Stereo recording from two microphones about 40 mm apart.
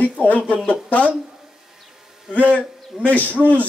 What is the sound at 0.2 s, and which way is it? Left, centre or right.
Speech, left.